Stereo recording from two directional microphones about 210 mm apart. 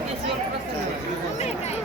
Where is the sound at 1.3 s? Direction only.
30° left (ahead or behind).